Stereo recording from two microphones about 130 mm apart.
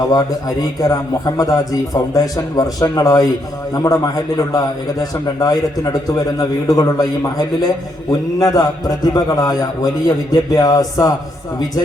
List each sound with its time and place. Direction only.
0.1 s a man's voice: 30° left (ahead or behind)